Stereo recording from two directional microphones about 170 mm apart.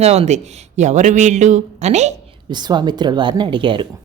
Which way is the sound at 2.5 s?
25° right (ahead or behind).